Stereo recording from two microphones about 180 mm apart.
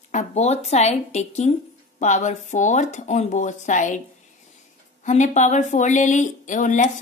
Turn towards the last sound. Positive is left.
turn(degrees=45)  # may be behind; listen again after turning